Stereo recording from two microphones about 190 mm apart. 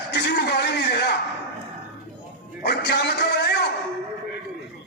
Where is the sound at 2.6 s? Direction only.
60° left (ahead or behind).